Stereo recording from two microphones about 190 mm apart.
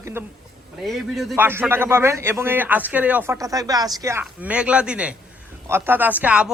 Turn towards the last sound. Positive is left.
turn(degrees=-5)  # may be behind; listen again after turning